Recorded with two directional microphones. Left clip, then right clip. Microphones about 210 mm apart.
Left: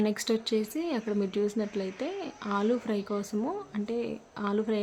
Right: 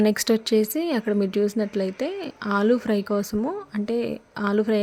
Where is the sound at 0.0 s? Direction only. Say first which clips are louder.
Right 8 dB; 30° right (ahead or behind).